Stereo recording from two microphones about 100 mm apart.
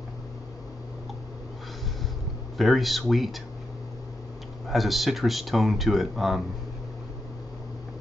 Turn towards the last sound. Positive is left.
turn(degrees=0)  # may be behind; listen again after turning